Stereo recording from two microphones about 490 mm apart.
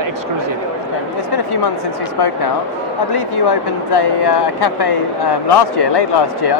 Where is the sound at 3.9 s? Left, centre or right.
Left.